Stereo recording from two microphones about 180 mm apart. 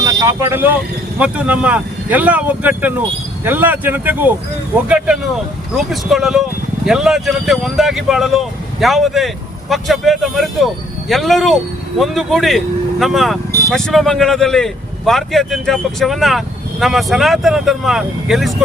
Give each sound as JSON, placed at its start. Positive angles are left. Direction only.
{"t": 0.0, "sound": "speech", "side_deg": -20}